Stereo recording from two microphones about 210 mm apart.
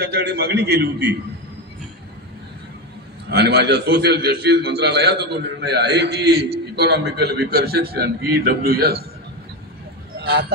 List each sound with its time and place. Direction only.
0.0 s a man's voice: 50° right (ahead or behind)
3.3 s a man's voice: 50° right (ahead or behind)
10.1 s vehicle: 50° right (ahead or behind)